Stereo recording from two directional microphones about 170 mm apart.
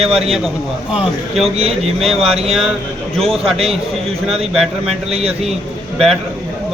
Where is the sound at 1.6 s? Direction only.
35° right (ahead or behind).